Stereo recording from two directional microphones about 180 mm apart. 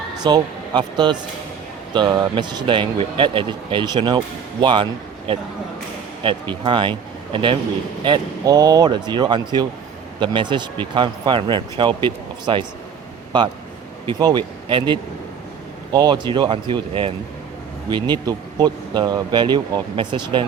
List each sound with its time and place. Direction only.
0.2 s speech: 25° right (ahead or behind)
14.1 s speech: 25° right (ahead or behind)